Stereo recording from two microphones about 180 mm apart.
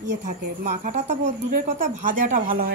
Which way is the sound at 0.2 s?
40° right (ahead or behind).